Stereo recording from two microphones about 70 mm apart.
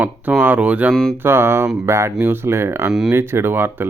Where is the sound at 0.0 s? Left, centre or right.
Right.